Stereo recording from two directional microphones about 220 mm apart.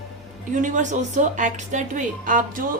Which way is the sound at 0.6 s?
35° right (ahead or behind).